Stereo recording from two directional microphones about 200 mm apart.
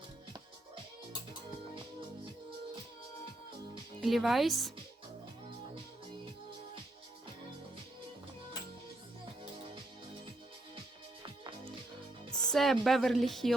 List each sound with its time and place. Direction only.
4.0 s speech: centre (ahead or behind)
11.2 s music: 25° right (ahead or behind)
12.3 s a woman's voice: 5° left (ahead or behind)